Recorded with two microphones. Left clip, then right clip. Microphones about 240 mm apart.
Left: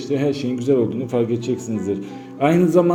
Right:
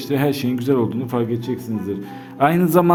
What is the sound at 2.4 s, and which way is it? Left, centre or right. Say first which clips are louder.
Speech: even; right.